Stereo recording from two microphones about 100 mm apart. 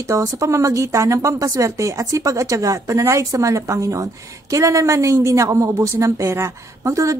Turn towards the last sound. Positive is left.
turn(degrees=-30)  # may be behind; listen again after turning